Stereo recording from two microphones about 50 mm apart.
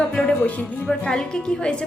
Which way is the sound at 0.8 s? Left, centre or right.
Centre.